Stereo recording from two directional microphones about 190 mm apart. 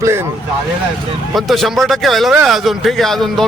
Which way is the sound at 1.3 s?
Centre (ahead or behind).